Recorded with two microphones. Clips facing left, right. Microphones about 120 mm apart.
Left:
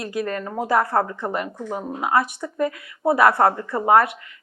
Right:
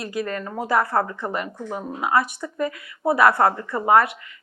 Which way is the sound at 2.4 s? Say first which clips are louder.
Left 2 dB; 40° left (ahead or behind).